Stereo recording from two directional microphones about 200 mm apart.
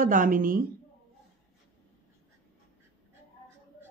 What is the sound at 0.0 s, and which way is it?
Speech, 40° right (ahead or behind).